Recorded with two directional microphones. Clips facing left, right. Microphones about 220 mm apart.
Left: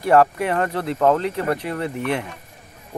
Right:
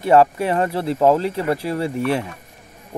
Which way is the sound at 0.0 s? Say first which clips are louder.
Right 2 dB; 25° right (ahead or behind).